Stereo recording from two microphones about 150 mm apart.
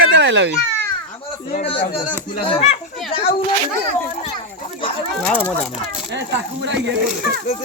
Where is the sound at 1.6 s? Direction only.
35° left (ahead or behind).